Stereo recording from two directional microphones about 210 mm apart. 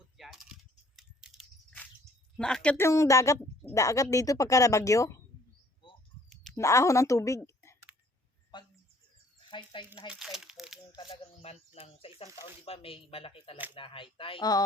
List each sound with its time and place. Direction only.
0.2 s coin: centre (ahead or behind)
0.9 s keys jangling: 5° right (ahead or behind)
2.3 s a woman's voice: 5° left (ahead or behind)
6.3 s a sound: centre (ahead or behind)
6.6 s a woman's voice: 15° left (ahead or behind)
8.5 s a sound: 20° left (ahead or behind)
9.5 s speech: 20° left (ahead or behind)
10.1 s crumpling: centre (ahead or behind)
10.9 s speech: 25° left (ahead or behind)